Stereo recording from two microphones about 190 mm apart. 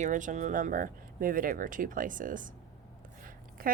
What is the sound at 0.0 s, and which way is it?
A woman's voice, 40° right (ahead or behind).